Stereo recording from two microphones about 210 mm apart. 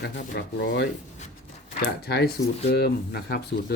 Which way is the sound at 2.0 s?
50° left (ahead or behind).